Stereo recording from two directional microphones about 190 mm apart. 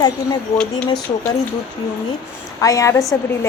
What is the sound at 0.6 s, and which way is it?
Speech, 5° left (ahead or behind).